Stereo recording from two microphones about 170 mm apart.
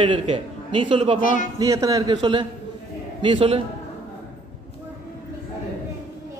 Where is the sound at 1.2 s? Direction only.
50° left (ahead or behind).